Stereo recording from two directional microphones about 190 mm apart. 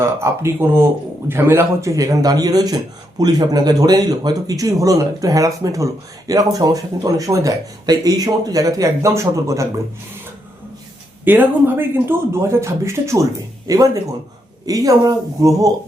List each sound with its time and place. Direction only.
0.0 s a man's voice: 15° right (ahead or behind)
11.3 s a man's voice: 10° right (ahead or behind)